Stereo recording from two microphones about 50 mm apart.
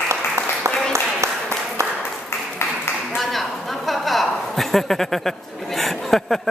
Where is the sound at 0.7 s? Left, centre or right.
Right.